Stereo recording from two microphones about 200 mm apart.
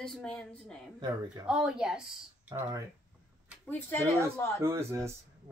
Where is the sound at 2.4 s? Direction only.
15° right (ahead or behind).